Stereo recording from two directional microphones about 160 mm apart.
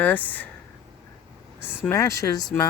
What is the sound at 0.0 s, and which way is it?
Speech, 10° left (ahead or behind).